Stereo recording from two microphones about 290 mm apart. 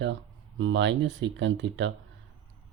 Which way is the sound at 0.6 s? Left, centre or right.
Right.